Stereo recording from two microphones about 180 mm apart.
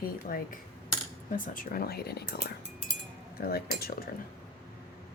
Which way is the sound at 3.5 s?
60° left (ahead or behind).